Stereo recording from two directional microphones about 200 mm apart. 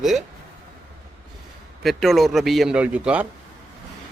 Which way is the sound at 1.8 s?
Centre (ahead or behind).